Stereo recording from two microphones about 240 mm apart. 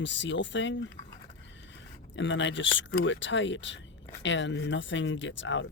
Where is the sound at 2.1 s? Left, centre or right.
Left.